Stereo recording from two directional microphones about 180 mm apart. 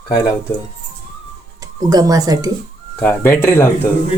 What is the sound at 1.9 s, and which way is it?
Speech, 20° right (ahead or behind).